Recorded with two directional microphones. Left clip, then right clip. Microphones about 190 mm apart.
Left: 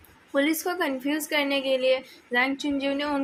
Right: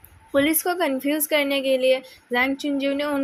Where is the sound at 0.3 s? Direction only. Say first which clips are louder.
Right 4 dB; 30° right (ahead or behind).